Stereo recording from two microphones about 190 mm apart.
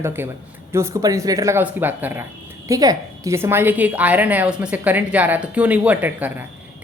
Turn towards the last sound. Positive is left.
turn(degrees=-10)  # may be behind; listen again after turning